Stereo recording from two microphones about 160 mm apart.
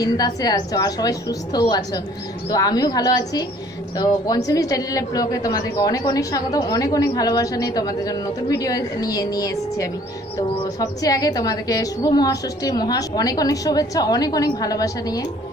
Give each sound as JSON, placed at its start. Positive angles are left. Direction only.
{"t": 0.0, "sound": "a woman's voice", "side_deg": 25}
{"t": 4.5, "sound": "a woman's voice", "side_deg": 20}